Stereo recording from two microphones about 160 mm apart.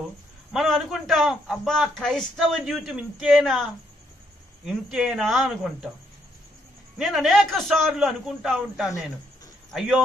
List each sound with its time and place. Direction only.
0.5 s a man's voice: centre (ahead or behind)
4.6 s a man's voice: 5° right (ahead or behind)
7.0 s a man's voice: centre (ahead or behind)